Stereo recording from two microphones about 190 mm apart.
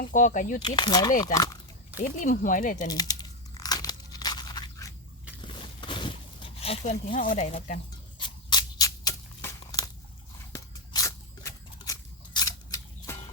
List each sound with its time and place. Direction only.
0.0 s speech: 45° left (ahead or behind)
0.8 s speech: 20° left (ahead or behind)
2.0 s speech: 45° left (ahead or behind)
2.7 s crunch: 20° left (ahead or behind)
5.4 s a sound: 25° left (ahead or behind)
7.1 s speech: 45° left (ahead or behind)
8.2 s a sound: 20° left (ahead or behind)